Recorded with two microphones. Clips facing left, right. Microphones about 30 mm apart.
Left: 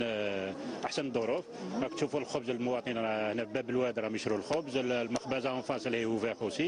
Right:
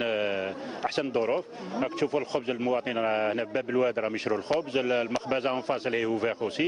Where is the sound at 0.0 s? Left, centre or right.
Right.